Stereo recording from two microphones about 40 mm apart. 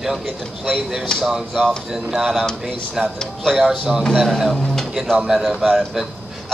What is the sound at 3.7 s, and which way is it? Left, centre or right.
Speech, right.